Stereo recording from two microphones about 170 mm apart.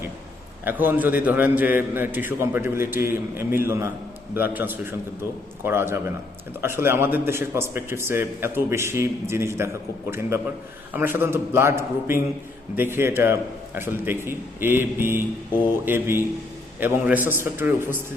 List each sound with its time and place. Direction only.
0.6 s a man's voice: 10° right (ahead or behind)